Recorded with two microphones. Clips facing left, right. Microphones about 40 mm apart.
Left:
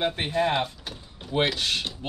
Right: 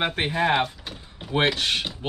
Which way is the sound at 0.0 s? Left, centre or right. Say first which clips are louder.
Right 1 dB; right.